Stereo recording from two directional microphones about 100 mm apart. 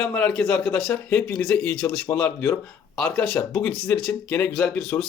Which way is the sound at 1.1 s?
30° left (ahead or behind).